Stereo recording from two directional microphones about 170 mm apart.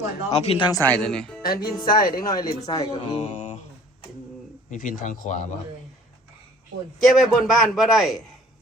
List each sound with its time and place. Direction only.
0.3 s speech: 35° left (ahead or behind)
0.7 s a man's voice: 10° left (ahead or behind)
1.4 s speech: 60° left (ahead or behind)
2.1 s speech: 20° left (ahead or behind)
2.9 s mantra: 35° left (ahead or behind)
4.7 s speech: 50° left (ahead or behind)
7.0 s a man's voice: centre (ahead or behind)